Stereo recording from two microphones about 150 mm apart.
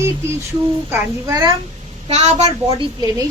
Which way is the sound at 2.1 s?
50° right (ahead or behind).